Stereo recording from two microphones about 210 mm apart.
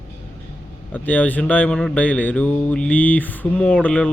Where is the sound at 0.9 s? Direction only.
10° left (ahead or behind).